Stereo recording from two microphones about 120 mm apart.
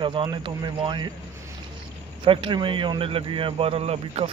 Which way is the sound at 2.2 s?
45° right (ahead or behind).